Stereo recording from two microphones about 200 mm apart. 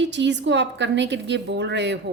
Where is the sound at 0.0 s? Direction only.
60° right (ahead or behind).